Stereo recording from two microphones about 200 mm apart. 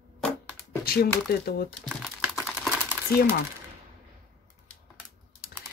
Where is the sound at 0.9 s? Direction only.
50° left (ahead or behind).